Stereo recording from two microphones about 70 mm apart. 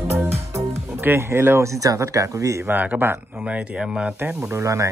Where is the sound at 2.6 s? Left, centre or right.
Right.